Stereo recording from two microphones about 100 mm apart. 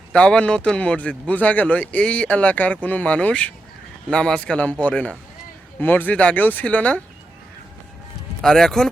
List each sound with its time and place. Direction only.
0.1 s speech: 10° left (ahead or behind)
8.4 s speech: 5° left (ahead or behind)